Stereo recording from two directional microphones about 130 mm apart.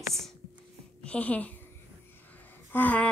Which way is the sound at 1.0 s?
10° left (ahead or behind).